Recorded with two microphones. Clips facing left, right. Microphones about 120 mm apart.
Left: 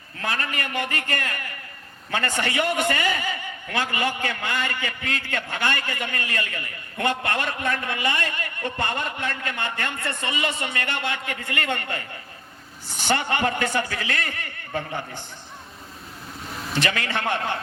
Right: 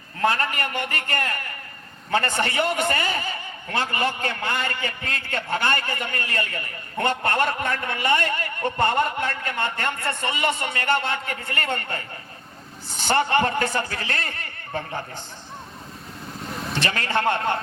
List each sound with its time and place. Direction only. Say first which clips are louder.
0.2 s a man's voice: right 6 dB; 35° right (ahead or behind)
13.1 s a man's voice: right 5 dB; 40° right (ahead or behind)
16.8 s a man's voice: right 4 dB; 35° right (ahead or behind)